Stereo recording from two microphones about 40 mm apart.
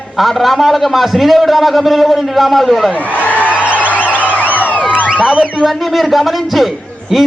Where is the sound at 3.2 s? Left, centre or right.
Left.